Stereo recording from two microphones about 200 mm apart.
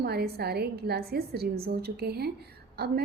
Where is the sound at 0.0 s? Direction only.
50° right (ahead or behind).